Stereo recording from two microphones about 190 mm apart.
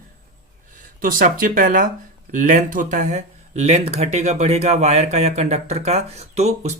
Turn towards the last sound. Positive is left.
turn(degrees=-35)  # may be behind; listen again after turning